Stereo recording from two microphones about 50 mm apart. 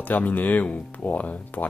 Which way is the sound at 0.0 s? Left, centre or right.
Left.